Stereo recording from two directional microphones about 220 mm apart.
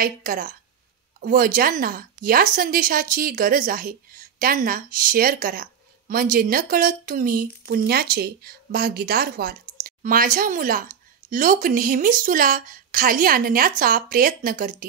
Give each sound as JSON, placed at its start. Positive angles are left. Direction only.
{"t": 0.0, "sound": "a woman's voice", "side_deg": -40}